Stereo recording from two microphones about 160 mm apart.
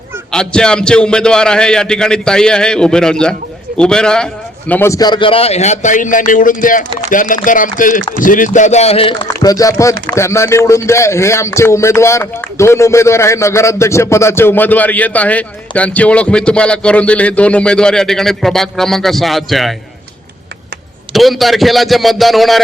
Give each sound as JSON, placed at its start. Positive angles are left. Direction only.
{"t": 0.3, "sound": "a man's voice", "side_deg": 5}
{"t": 4.7, "sound": "a man's voice", "side_deg": 15}
{"t": 9.4, "sound": "speech", "side_deg": 20}
{"t": 21.1, "sound": "a man's voice", "side_deg": 0}